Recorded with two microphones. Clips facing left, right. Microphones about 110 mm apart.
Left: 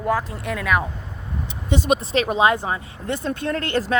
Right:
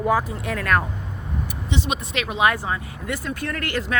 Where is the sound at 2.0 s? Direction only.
35° left (ahead or behind).